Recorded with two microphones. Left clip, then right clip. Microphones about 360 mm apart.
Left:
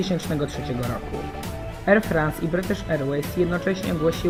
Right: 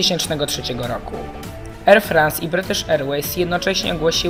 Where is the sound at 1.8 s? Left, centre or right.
Right.